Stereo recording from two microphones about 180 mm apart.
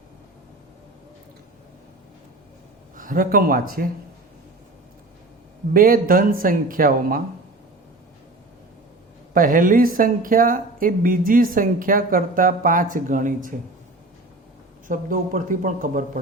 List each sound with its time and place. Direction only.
2.9 s speech: 50° right (ahead or behind)
5.7 s speech: 50° right (ahead or behind)
9.3 s speech: 50° right (ahead or behind)
14.8 s speech: 50° right (ahead or behind)